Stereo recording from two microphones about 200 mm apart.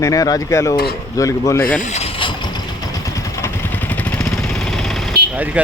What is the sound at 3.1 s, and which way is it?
Vehicle, 10° left (ahead or behind).